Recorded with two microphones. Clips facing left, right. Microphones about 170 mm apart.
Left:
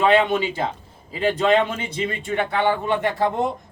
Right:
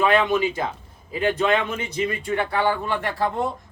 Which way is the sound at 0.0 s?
30° left (ahead or behind).